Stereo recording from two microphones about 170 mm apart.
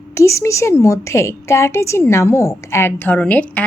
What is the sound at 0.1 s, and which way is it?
A woman's voice, 15° left (ahead or behind).